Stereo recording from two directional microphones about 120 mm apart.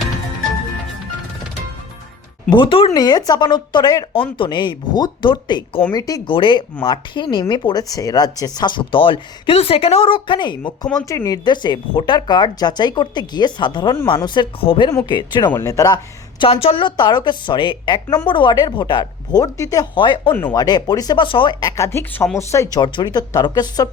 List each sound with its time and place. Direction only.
2.5 s a woman's voice: 45° left (ahead or behind)
2.9 s speech: 35° left (ahead or behind)
6.2 s speech: 45° left (ahead or behind)
10.6 s speech: 10° left (ahead or behind)
11.1 s a woman's voice: 30° left (ahead or behind); by 14.8 s 45° left (ahead or behind)
14.8 s speech: 35° left (ahead or behind)
15.4 s speech: 25° left (ahead or behind)
16.4 s a woman's voice: 50° left (ahead or behind); by 19.9 s 30° left (ahead or behind)
20.0 s a woman's voice: 40° left (ahead or behind)
21.8 s speech: 20° left (ahead or behind)
22.8 s speech: 35° left (ahead or behind)